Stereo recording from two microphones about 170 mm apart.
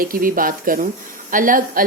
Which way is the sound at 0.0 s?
55° right (ahead or behind).